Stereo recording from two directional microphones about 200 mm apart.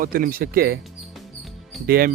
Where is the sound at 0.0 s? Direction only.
45° right (ahead or behind).